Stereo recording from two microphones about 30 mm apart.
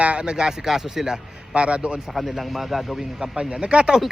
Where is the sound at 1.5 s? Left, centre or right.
Right.